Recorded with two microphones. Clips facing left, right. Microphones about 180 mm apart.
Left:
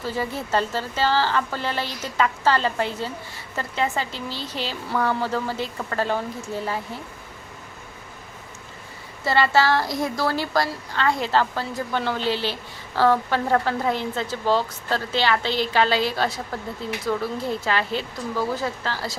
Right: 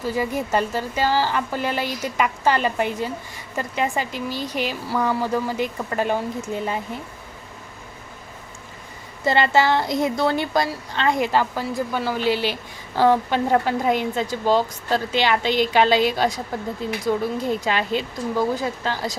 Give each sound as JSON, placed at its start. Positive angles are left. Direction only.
{"t": 0.0, "sound": "a woman's voice", "side_deg": -15}
{"t": 9.2, "sound": "a woman's voice", "side_deg": -20}